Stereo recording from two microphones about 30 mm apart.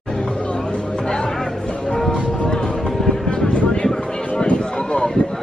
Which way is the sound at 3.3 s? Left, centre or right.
Left.